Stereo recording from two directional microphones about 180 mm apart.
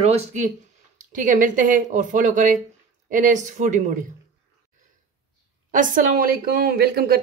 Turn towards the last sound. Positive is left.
turn(degrees=-60)  # may be behind; listen again after turning